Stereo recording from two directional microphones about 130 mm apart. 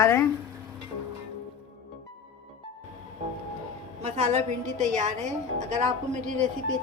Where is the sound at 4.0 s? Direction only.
60° right (ahead or behind).